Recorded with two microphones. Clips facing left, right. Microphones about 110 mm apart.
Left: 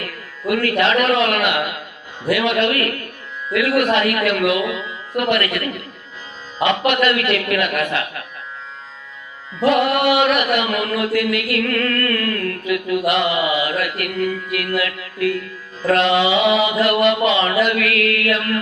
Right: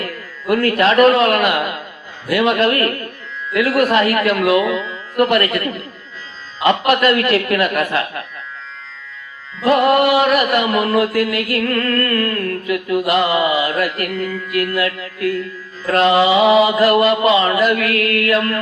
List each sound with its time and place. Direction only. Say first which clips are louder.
0.0 s speech: even; 35° right (ahead or behind)
2.3 s music: right 3 dB; 35° right (ahead or behind)
9.6 s music: right 3 dB; 35° right (ahead or behind)